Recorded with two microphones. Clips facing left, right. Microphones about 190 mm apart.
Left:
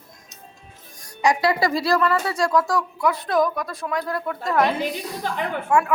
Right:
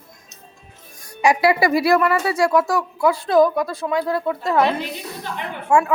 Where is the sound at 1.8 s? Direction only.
20° right (ahead or behind).